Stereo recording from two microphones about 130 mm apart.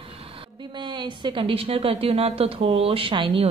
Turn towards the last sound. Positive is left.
turn(degrees=-40)  # may be behind; listen again after turning